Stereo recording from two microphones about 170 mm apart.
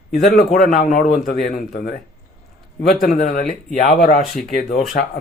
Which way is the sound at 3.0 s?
55° left (ahead or behind).